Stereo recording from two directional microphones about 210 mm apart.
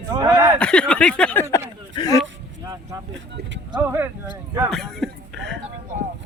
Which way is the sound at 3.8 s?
10° right (ahead or behind).